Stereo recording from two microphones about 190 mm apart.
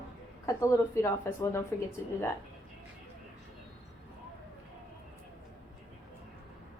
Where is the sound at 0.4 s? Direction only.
15° left (ahead or behind).